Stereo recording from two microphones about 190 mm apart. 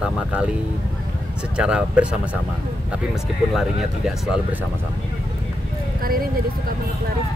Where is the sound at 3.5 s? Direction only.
Centre (ahead or behind).